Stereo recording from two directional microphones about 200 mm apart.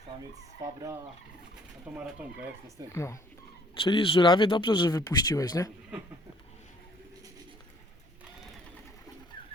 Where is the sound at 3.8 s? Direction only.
25° left (ahead or behind).